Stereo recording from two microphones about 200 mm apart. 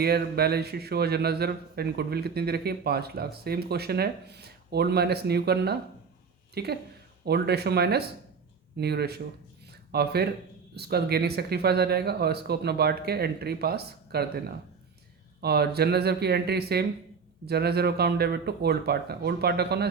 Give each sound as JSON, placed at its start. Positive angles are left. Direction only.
{"t": 0.0, "sound": "speech", "side_deg": -50}